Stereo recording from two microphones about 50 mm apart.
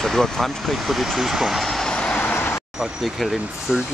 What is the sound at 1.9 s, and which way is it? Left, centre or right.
Vehicle, left.